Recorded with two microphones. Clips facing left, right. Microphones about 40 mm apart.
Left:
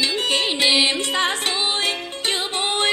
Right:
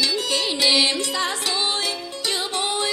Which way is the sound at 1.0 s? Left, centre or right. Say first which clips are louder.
Left 3 dB; left.